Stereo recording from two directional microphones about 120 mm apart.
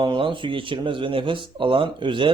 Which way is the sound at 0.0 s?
45° right (ahead or behind).